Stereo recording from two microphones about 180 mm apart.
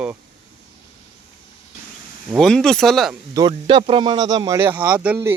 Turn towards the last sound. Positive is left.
turn(degrees=-10)  # may be behind; listen again after turning